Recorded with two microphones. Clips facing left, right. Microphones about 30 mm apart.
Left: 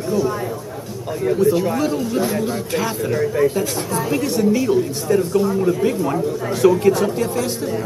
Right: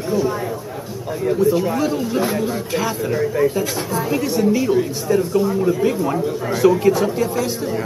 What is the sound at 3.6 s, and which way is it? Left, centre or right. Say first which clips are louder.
Speech: even; centre.